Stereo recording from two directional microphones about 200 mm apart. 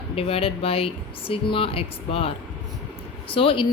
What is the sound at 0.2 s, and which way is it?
Speech, 30° left (ahead or behind).